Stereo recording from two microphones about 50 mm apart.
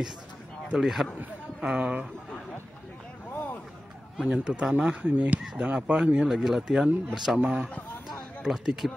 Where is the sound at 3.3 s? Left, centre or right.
Left.